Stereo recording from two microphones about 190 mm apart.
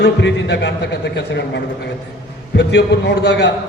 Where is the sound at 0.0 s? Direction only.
65° left (ahead or behind).